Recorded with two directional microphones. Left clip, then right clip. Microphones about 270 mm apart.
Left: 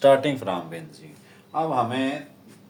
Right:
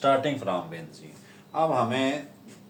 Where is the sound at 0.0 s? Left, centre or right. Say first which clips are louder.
Left 5 dB; left.